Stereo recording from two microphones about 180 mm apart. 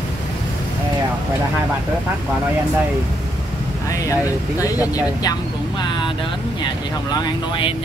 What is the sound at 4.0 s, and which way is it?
Speech, 20° left (ahead or behind).